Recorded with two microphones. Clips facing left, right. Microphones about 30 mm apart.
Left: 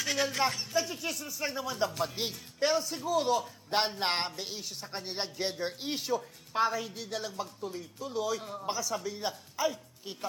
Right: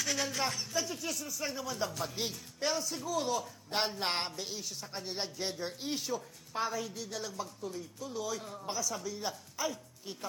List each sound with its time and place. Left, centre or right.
0.0 s a man's voice: centre